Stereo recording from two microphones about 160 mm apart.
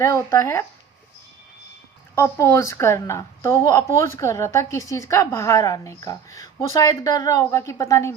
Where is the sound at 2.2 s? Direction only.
15° left (ahead or behind).